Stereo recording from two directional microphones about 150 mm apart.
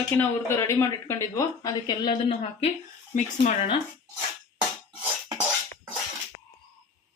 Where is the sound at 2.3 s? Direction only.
40° left (ahead or behind).